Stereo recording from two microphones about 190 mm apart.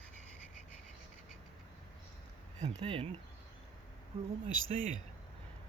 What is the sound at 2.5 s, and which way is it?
Speech, 30° right (ahead or behind).